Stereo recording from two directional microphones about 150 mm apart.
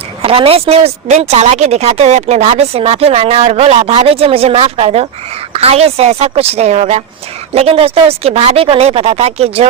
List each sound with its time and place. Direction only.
0.2 s speech: 40° right (ahead or behind)